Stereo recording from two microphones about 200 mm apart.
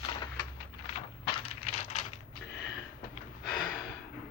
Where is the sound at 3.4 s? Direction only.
5° left (ahead or behind).